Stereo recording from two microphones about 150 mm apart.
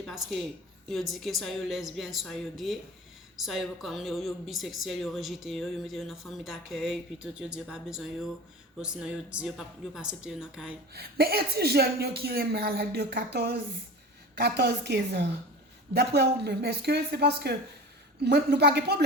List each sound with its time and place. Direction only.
0.0 s a woman's voice: centre (ahead or behind)
10.9 s a woman's voice: 90° right